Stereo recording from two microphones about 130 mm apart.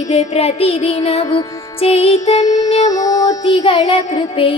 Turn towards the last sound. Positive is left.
turn(degrees=45)  # may be behind; listen again after turning